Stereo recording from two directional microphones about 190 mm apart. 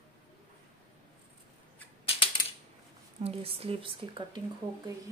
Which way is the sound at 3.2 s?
30° right (ahead or behind).